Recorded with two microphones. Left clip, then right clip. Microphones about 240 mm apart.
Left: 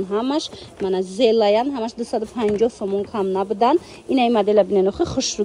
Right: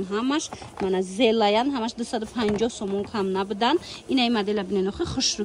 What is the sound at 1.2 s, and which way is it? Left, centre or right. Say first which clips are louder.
Speech: left 5 dB; centre.